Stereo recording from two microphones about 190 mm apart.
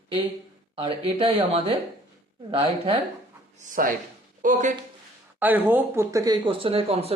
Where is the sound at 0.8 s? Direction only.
30° right (ahead or behind).